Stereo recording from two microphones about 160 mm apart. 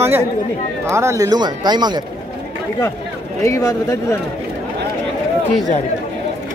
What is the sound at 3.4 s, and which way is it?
Speech, 20° left (ahead or behind).